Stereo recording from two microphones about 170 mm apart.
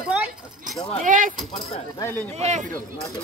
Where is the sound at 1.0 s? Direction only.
50° right (ahead or behind).